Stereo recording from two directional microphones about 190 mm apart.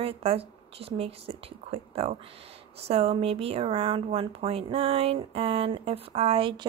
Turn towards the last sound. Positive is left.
turn(degrees=-25)  # may be behind; listen again after turning